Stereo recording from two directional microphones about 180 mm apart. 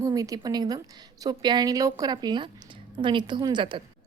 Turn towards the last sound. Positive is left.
turn(degrees=-25)  # may be behind; listen again after turning